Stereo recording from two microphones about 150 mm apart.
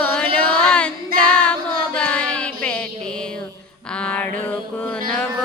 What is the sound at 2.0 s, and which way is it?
Child singing, 5° left (ahead or behind).